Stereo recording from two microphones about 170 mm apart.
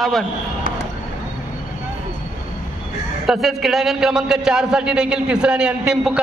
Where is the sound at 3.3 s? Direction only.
Centre (ahead or behind).